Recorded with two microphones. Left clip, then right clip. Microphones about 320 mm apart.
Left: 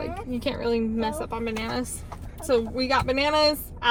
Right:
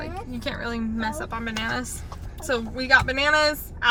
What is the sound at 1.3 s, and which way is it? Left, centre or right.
Speech, right.